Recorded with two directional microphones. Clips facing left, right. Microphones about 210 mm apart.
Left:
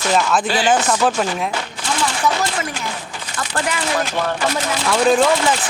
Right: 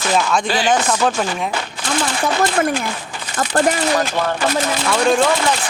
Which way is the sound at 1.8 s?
55° right (ahead or behind).